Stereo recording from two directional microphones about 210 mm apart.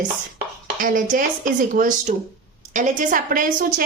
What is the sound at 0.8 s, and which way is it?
A woman's voice, 40° right (ahead or behind).